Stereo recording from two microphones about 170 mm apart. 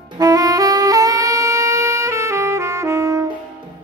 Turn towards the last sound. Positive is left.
turn(degrees=-20)  # may be behind; listen again after turning